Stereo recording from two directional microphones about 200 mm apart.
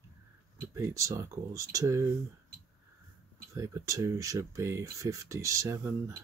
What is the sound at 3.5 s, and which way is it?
Speech, 15° right (ahead or behind).